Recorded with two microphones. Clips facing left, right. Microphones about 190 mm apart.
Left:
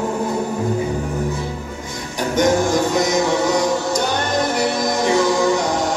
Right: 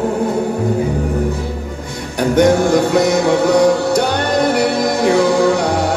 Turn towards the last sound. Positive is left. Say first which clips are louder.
# right 4 dB
turn(degrees=-60)  # may be behind; listen again after turning